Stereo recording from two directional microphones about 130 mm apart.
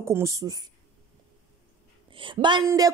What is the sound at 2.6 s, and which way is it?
Speech, 25° right (ahead or behind).